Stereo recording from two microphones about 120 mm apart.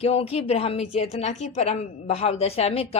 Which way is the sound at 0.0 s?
55° left (ahead or behind).